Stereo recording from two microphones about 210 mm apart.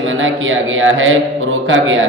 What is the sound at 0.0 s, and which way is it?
A man's voice, 70° right (ahead or behind).